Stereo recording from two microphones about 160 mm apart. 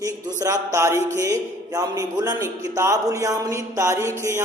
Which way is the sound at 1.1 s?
20° right (ahead or behind).